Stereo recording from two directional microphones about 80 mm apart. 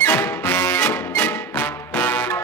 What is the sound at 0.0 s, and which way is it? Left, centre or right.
Music, left.